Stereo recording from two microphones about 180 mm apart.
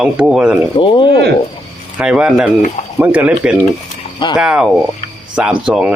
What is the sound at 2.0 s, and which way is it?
Speech, 5° right (ahead or behind).